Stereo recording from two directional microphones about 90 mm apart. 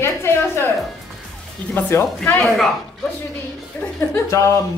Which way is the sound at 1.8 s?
25° left (ahead or behind).